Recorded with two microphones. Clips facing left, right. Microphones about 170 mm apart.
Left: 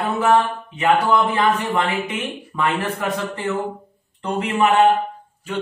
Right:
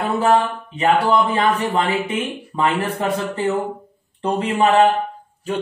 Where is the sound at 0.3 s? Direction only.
30° right (ahead or behind).